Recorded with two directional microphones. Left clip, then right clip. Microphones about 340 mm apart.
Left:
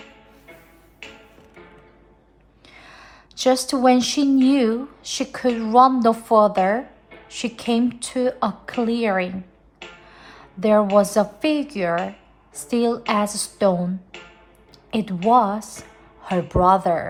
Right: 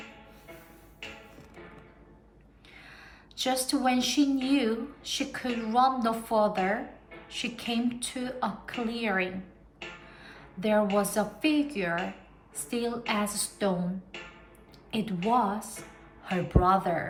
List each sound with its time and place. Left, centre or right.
2.7 s a woman's voice: centre